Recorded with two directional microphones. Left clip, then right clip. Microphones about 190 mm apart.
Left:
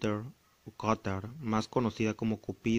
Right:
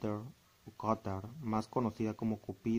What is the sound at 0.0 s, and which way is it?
A man's voice, 25° left (ahead or behind).